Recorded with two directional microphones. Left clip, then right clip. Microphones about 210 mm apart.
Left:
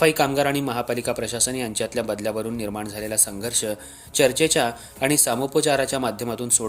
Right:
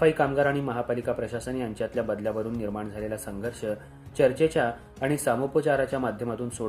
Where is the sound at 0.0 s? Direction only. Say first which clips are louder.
Left 3 dB; 35° left (ahead or behind).